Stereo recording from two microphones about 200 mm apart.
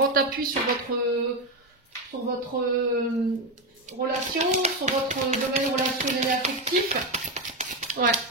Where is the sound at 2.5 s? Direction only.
45° right (ahead or behind).